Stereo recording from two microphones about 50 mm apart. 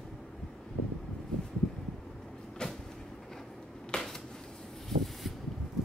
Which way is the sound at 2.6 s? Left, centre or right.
Centre.